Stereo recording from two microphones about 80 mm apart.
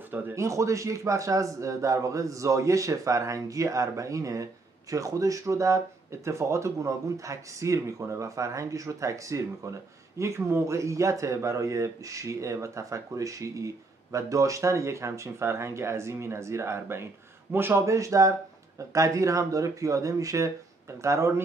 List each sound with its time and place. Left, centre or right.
0.1 s speech: right
0.4 s a man's voice: right